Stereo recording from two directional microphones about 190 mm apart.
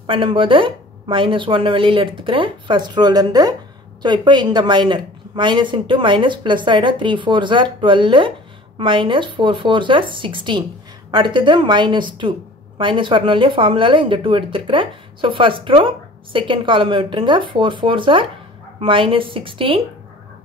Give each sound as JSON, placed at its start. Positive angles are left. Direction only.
{"t": 0.0, "sound": "a woman's voice", "side_deg": -25}